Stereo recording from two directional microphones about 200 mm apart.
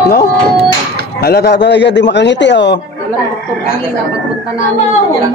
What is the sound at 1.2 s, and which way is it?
A man's voice, 55° left (ahead or behind).